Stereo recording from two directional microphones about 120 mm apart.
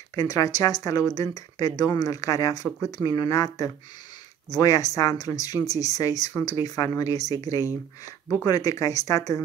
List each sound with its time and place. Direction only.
0.1 s speech: 30° left (ahead or behind)